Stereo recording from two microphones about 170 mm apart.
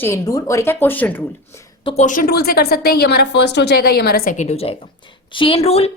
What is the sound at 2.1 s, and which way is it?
A woman's voice, 55° left (ahead or behind).